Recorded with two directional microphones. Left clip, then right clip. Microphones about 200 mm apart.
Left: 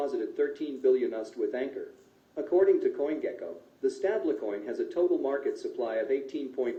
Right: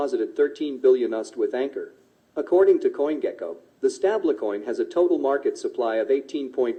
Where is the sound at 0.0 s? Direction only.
45° right (ahead or behind).